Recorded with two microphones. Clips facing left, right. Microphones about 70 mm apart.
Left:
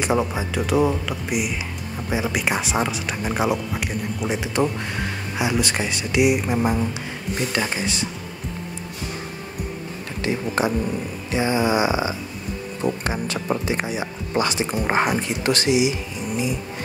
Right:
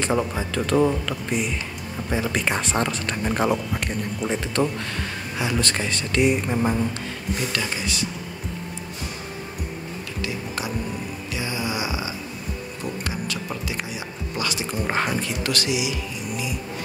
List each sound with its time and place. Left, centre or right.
0.0 s speech: centre
7.5 s speech: left
10.2 s a sound: left
12.8 s speech: left